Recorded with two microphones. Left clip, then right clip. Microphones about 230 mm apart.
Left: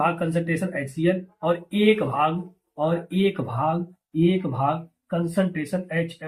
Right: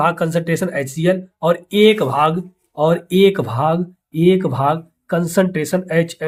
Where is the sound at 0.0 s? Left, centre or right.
Right.